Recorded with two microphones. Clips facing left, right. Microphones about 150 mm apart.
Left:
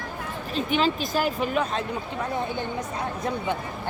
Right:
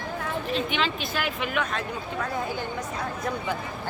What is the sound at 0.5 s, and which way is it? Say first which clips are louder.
Speech: left 6 dB; 40° left (ahead or behind).